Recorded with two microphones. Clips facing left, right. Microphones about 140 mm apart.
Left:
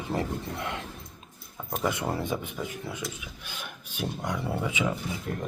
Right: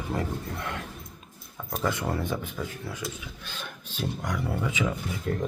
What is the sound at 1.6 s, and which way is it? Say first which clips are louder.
Speech: even; 10° left (ahead or behind).